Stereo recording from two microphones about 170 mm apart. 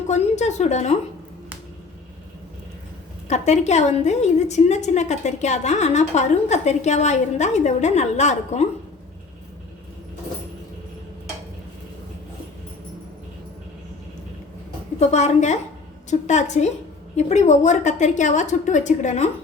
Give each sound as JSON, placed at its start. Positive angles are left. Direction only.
{"t": 0.1, "sound": "a woman's voice", "side_deg": 40}
{"t": 3.2, "sound": "a woman's voice", "side_deg": 40}
{"t": 14.9, "sound": "a woman's voice", "side_deg": 40}